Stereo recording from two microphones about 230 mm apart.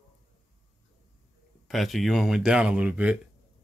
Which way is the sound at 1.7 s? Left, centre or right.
Centre.